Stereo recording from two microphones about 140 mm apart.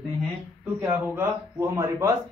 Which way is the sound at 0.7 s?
15° right (ahead or behind).